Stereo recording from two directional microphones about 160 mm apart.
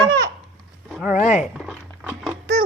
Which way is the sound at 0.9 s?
Centre (ahead or behind).